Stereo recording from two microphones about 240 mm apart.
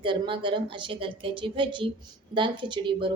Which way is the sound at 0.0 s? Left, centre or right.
Centre.